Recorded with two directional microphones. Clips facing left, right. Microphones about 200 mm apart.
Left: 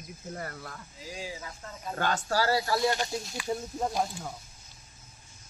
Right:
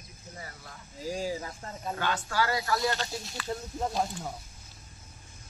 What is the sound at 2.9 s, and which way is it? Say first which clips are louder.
Speech: left 3 dB; 15° left (ahead or behind).